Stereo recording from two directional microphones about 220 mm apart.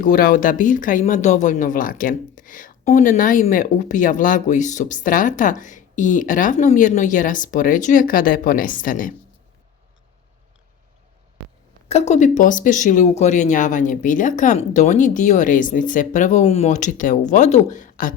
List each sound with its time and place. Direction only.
0.0 s speech: 40° left (ahead or behind)
11.9 s speech: 30° left (ahead or behind)